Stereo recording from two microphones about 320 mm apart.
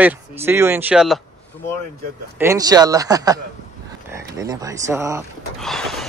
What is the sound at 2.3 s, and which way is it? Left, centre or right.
Speech, centre.